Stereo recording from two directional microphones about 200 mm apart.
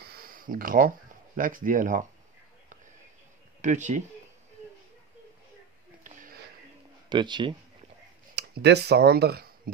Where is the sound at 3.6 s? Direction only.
35° right (ahead or behind).